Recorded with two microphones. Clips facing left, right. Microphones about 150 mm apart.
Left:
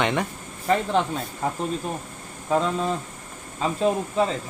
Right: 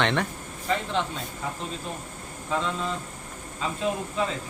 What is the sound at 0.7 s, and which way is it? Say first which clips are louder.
Speech: left 6 dB; 50° left (ahead or behind).